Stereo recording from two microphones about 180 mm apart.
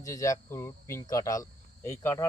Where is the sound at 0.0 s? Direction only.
20° left (ahead or behind).